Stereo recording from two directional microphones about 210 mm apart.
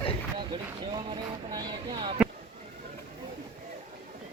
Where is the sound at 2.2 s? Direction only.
5° right (ahead or behind).